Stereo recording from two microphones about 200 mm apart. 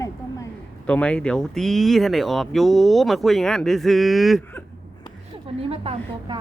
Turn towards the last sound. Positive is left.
turn(degrees=-30)  # may be behind; listen again after turning